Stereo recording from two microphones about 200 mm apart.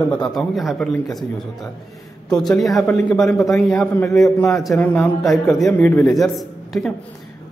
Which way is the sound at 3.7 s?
10° left (ahead or behind).